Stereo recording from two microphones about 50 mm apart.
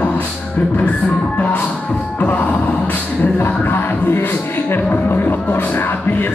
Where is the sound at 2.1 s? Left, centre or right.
Left.